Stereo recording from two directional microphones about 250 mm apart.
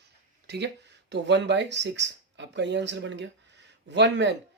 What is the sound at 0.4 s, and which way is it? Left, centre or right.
Speech, right.